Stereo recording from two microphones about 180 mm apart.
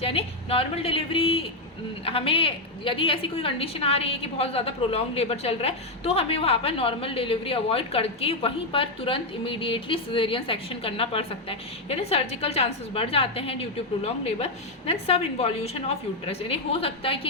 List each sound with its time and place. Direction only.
0.0 s a woman's voice: 35° left (ahead or behind)